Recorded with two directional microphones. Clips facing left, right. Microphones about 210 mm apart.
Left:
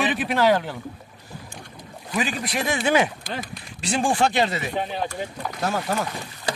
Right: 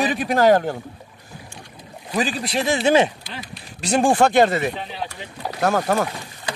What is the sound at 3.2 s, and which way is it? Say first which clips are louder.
Speech: left 4 dB; 50° left (ahead or behind).